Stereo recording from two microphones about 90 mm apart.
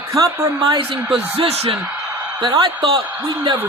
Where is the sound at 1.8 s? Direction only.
20° right (ahead or behind).